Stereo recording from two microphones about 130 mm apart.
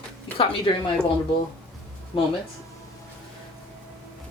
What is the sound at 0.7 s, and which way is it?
Speech, 45° left (ahead or behind).